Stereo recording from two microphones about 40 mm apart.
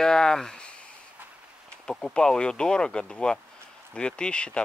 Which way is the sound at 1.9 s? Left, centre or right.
Centre.